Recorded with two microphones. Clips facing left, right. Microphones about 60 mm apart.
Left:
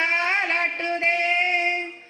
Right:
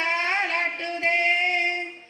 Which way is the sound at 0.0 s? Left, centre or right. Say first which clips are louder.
Left 2 dB; left.